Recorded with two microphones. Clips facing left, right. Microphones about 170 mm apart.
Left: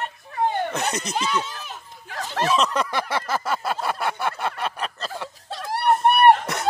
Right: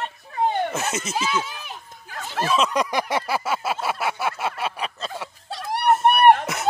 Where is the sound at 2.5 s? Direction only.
15° right (ahead or behind).